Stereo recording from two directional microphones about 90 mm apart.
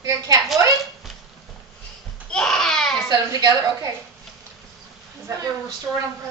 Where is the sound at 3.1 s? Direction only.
50° right (ahead or behind).